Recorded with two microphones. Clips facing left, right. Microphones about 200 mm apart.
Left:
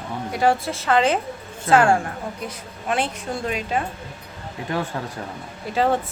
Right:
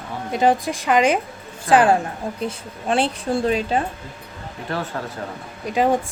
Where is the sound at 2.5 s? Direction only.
30° right (ahead or behind).